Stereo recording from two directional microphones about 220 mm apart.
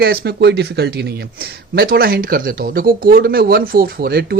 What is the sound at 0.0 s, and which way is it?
Speech, 45° right (ahead or behind).